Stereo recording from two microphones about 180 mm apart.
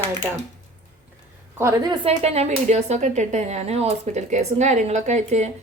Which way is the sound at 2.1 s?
35° right (ahead or behind).